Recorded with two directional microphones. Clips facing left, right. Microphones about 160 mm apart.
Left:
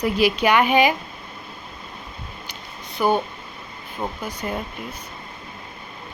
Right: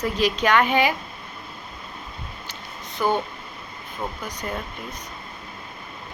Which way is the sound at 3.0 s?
10° left (ahead or behind).